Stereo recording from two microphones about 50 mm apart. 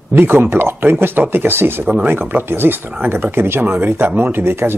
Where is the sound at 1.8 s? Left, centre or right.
Right.